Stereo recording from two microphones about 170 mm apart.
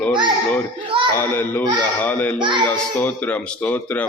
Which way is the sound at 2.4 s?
30° right (ahead or behind).